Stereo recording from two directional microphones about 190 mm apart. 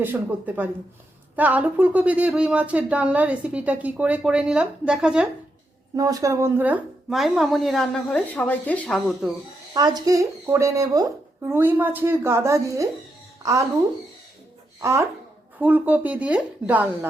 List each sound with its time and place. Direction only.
0.0 s speech: 10° right (ahead or behind)
6.0 s a woman's voice: 20° right (ahead or behind); by 9.3 s centre (ahead or behind)
9.7 s a woman's voice: 20° right (ahead or behind)
14.8 s speech: 15° right (ahead or behind)